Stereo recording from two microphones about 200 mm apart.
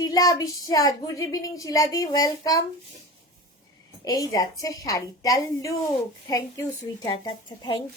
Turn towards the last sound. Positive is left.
turn(degrees=20)  # may be behind; listen again after turning